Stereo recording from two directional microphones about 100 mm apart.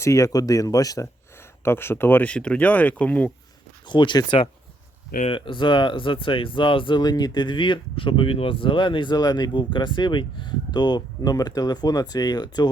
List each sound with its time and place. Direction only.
0.0 s speech: 30° left (ahead or behind)
1.6 s speech: 25° left (ahead or behind)
3.8 s speech: 50° left (ahead or behind)
5.2 s speech: 60° left (ahead or behind); by 12.7 s 45° left (ahead or behind)